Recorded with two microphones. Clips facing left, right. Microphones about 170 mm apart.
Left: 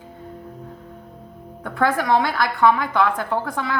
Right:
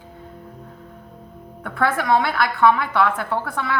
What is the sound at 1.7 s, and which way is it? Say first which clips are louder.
A woman's voice: even; 20° left (ahead or behind).